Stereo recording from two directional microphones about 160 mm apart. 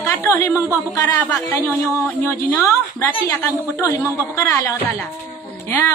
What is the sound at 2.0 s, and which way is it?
A woman's voice, 15° left (ahead or behind).